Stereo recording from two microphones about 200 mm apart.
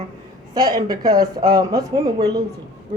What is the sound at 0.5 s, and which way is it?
A man's voice, 20° right (ahead or behind).